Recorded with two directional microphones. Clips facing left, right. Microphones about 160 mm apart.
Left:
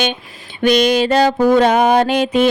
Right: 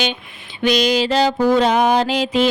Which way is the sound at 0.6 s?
55° left (ahead or behind).